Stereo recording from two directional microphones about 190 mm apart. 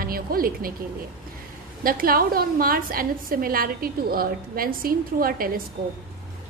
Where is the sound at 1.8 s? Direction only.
50° right (ahead or behind).